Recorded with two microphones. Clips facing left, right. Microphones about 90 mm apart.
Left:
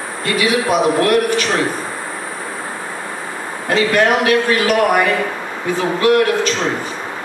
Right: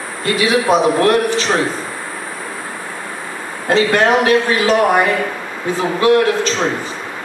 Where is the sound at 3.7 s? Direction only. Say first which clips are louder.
Right 1 dB; 30° right (ahead or behind).